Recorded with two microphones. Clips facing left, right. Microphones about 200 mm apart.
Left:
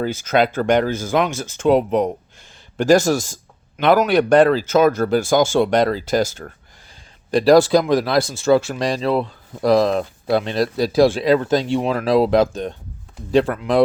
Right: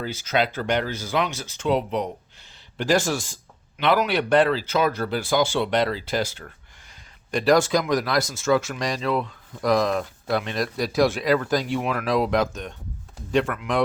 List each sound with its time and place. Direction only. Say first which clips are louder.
0.0 s speech: left 6 dB; 50° left (ahead or behind)
7.3 s speech: left 7 dB; 35° left (ahead or behind)